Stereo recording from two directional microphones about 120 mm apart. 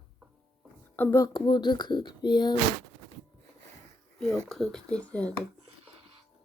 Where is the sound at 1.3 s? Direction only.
40° left (ahead or behind).